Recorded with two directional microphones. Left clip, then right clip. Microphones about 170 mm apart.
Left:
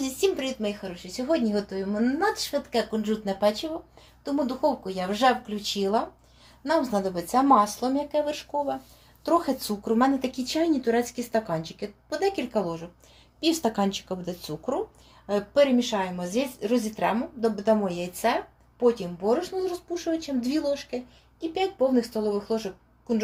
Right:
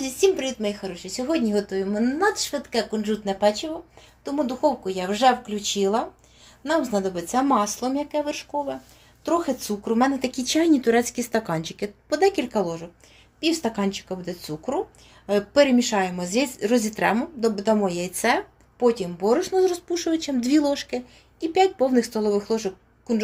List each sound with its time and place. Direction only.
0.0 s speech: 20° right (ahead or behind)
10.2 s speech: 25° right (ahead or behind)
10.4 s speech: 40° right (ahead or behind); by 12.9 s 25° right (ahead or behind)
13.4 s speech: 5° right (ahead or behind)
15.3 s speech: 35° right (ahead or behind)